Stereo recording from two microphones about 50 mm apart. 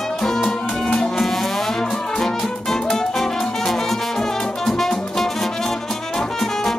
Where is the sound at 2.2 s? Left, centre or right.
Centre.